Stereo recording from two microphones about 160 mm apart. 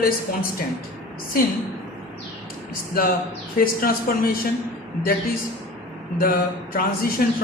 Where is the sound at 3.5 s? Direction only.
65° left (ahead or behind).